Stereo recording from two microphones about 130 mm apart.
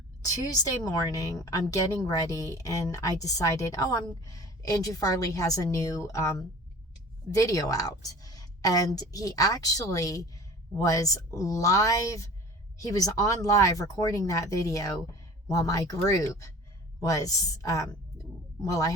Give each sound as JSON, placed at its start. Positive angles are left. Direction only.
{"t": 0.9, "sound": "speech", "side_deg": 30}
{"t": 7.3, "sound": "speech", "side_deg": 25}